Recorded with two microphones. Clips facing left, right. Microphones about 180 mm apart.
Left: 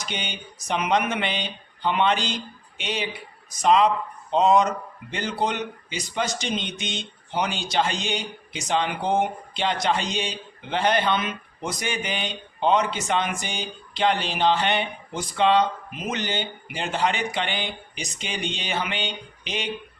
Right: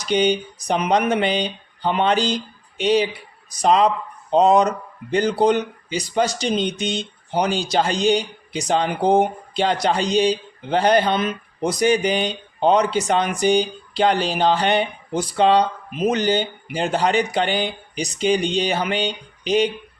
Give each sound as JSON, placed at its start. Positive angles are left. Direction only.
{"t": 0.0, "sound": "speech", "side_deg": -40}